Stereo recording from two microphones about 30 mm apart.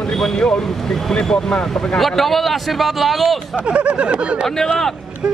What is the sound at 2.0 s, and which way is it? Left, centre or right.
Speech, centre.